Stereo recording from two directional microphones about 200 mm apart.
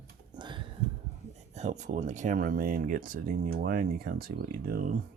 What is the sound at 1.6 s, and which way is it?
Speech, 35° right (ahead or behind).